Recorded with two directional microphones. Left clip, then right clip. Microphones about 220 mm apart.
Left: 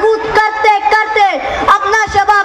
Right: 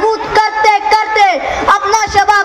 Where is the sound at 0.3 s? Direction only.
20° right (ahead or behind).